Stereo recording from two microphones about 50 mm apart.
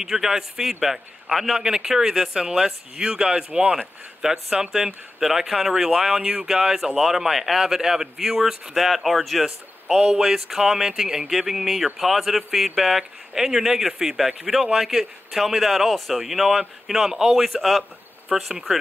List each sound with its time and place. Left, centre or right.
0.0 s a man's voice: centre